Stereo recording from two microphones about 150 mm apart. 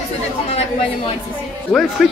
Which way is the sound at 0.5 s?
40° left (ahead or behind).